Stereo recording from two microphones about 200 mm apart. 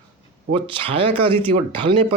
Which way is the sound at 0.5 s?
25° right (ahead or behind).